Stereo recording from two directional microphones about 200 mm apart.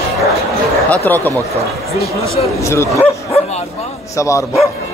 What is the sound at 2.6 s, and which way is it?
Speech, 15° left (ahead or behind).